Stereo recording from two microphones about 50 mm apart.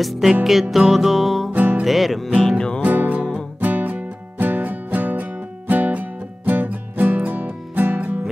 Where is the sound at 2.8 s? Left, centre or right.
Right.